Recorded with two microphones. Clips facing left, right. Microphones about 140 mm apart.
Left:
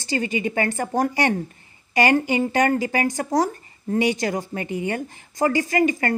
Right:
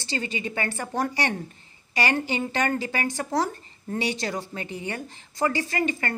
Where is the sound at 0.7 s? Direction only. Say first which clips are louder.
Left 5 dB; 45° left (ahead or behind).